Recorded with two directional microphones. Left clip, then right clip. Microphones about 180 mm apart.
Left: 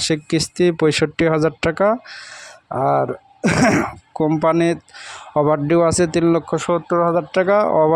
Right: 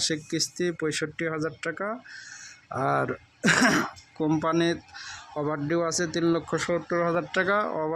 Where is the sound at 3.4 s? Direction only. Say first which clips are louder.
Left 5 dB; 35° left (ahead or behind).